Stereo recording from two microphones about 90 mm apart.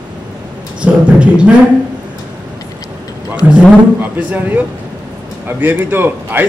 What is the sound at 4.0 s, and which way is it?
A man's voice, 20° right (ahead or behind).